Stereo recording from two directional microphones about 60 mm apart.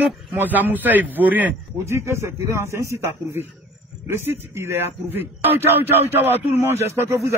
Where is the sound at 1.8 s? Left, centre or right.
Right.